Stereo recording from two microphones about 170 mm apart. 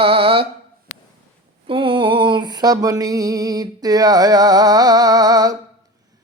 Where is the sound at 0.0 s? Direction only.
35° right (ahead or behind).